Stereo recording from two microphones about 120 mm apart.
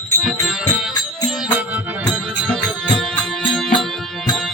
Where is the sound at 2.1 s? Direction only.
Centre (ahead or behind).